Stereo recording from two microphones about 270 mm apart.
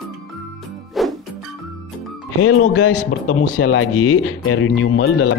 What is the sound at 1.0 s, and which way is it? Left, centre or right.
Music, centre.